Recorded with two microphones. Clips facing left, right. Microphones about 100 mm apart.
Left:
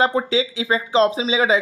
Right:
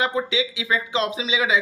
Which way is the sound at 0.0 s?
35° left (ahead or behind).